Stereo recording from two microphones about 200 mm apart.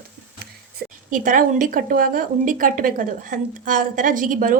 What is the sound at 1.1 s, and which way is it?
Speech, 40° right (ahead or behind).